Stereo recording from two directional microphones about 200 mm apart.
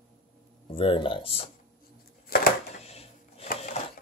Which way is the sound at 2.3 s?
45° left (ahead or behind).